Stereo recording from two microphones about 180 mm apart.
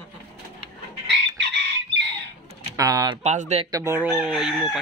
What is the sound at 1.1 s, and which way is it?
Chicken, 70° right (ahead or behind).